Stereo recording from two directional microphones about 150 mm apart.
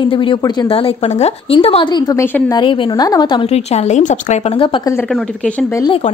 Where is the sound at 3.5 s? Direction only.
50° left (ahead or behind).